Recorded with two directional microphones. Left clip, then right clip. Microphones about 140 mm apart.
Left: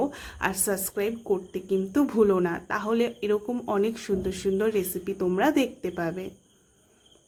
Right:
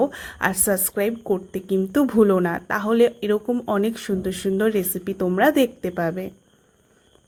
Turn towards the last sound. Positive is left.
turn(degrees=-30)  # may be behind; listen again after turning